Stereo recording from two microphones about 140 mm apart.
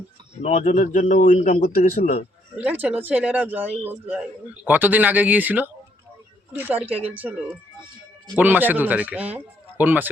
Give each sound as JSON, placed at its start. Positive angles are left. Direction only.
{"t": 0.4, "sound": "a man's voice", "side_deg": 65}
{"t": 2.6, "sound": "a man's voice", "side_deg": -10}